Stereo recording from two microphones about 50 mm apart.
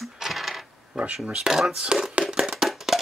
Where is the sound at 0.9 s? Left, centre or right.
Centre.